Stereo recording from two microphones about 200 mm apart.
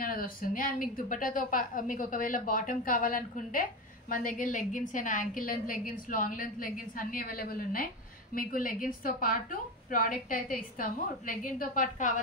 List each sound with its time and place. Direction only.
0.0 s a woman's voice: 45° left (ahead or behind)